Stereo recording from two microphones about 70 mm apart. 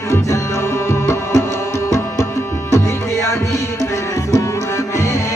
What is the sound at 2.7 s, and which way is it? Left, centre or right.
Music, left.